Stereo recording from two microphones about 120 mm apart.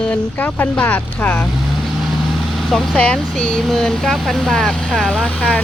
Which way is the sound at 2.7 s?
5° left (ahead or behind).